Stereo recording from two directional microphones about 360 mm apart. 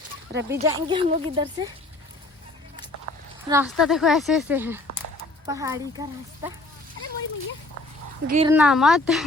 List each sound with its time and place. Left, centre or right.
0.4 s speech: centre
3.5 s speech: centre
8.3 s speech: centre
8.5 s speech: centre